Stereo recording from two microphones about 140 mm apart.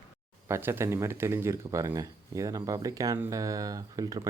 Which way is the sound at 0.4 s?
20° right (ahead or behind).